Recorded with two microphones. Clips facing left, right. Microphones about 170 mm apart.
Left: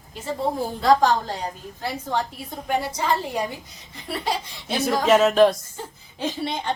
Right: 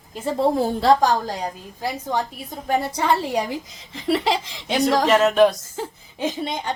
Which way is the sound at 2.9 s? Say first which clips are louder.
Right 3 dB; 65° right (ahead or behind).